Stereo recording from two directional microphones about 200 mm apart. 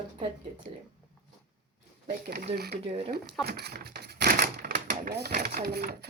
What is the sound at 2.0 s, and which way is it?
Speech, 50° right (ahead or behind).